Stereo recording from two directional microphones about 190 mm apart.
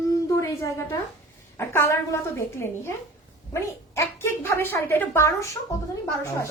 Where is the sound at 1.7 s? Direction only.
15° left (ahead or behind).